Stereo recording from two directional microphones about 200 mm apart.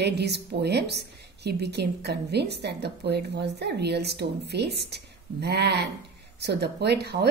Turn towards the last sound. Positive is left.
turn(degrees=-55)  # may be behind; listen again after turning